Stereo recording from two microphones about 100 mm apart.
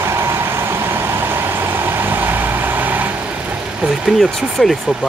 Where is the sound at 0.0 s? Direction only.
25° right (ahead or behind).